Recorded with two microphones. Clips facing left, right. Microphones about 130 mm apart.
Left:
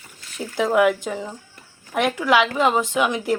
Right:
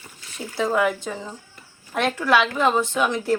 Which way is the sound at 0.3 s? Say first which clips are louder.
Left 3 dB; 15° left (ahead or behind).